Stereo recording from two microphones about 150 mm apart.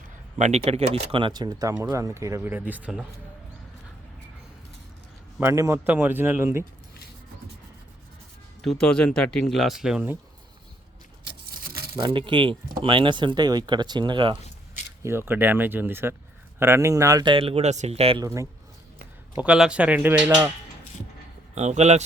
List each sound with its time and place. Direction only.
0.3 s speech: 50° right (ahead or behind); by 3.1 s 10° right (ahead or behind)
5.4 s speech: 20° right (ahead or behind)
8.6 s speech: 5° left (ahead or behind)
11.5 s a sound: 90° right
11.9 s speech: 30° right (ahead or behind)
15.0 s speech: 15° right (ahead or behind); by 18.2 s 40° right (ahead or behind)
18.2 s speech: 20° right (ahead or behind)
19.4 s speech: 5° right (ahead or behind)
21.5 s speech: 50° right (ahead or behind)